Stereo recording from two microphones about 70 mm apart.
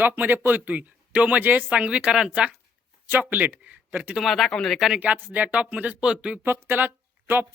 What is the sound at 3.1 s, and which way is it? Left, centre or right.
Speech, right.